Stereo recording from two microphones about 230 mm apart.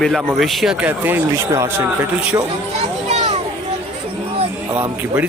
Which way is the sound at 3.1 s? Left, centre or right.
Right.